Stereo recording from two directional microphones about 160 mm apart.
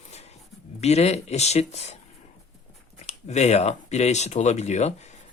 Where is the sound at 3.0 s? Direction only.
45° left (ahead or behind).